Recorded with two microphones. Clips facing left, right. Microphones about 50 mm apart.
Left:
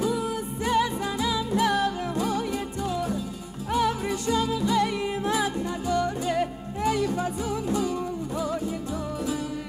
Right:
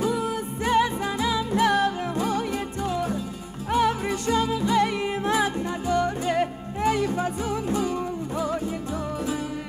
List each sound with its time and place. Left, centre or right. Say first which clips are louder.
0.0 s music: right 1 dB; right